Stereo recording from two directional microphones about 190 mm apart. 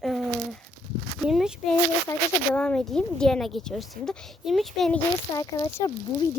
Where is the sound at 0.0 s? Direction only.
Centre (ahead or behind).